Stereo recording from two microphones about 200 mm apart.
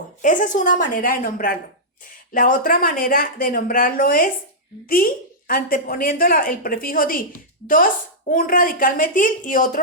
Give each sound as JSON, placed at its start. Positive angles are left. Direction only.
{"t": 0.2, "sound": "a woman's voice", "side_deg": 40}
{"t": 8.3, "sound": "a woman's voice", "side_deg": 45}